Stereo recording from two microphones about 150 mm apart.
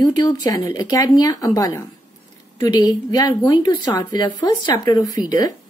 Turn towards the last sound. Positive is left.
turn(degrees=25)  # may be behind; listen again after turning